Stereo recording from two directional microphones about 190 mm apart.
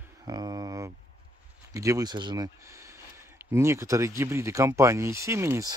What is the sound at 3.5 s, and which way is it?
Speech, 15° right (ahead or behind).